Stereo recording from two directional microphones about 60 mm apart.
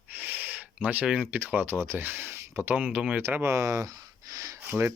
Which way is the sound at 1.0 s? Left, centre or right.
Right.